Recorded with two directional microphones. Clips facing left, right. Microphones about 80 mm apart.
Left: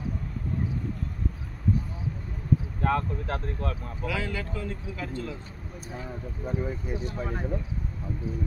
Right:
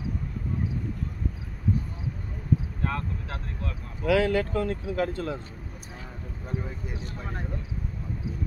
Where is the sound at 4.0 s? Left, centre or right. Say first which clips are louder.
Right 10 dB; right.